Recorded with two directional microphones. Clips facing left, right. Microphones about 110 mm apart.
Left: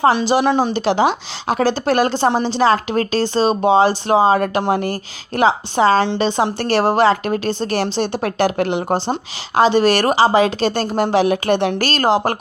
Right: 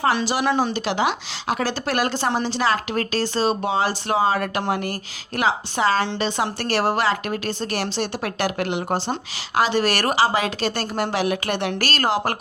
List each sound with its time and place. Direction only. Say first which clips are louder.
0.0 s a woman's voice: left 6 dB; 25° left (ahead or behind)